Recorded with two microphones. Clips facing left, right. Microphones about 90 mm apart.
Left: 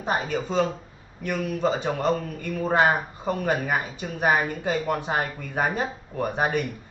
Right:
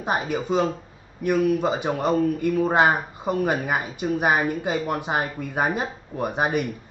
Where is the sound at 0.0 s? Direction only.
15° right (ahead or behind).